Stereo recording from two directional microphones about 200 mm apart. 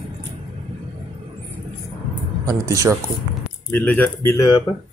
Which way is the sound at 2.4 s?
15° right (ahead or behind).